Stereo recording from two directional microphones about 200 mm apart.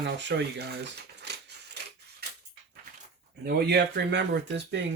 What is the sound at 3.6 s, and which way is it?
Speech, 55° right (ahead or behind).